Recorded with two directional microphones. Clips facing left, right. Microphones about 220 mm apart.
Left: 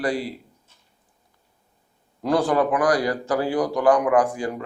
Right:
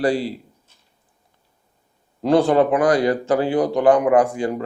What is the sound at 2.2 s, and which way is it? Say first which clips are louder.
Speech: right 5 dB; 25° right (ahead or behind).